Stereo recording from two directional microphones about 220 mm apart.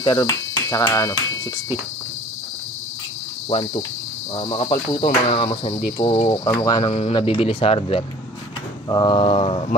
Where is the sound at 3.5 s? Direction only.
25° left (ahead or behind).